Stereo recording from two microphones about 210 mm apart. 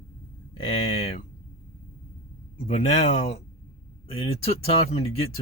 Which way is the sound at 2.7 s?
30° left (ahead or behind).